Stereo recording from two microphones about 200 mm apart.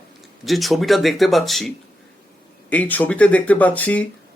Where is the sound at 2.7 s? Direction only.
10° left (ahead or behind).